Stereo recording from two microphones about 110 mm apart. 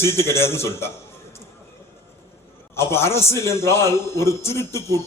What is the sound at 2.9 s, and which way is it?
A man's voice, 25° left (ahead or behind).